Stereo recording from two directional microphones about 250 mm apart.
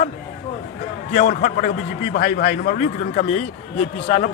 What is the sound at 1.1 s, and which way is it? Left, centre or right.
A man's voice, left.